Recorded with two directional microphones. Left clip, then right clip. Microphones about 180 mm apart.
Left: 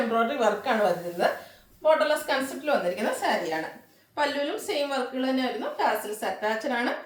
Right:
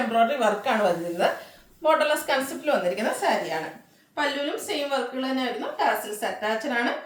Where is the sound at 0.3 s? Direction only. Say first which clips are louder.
Right 1 dB; 25° right (ahead or behind).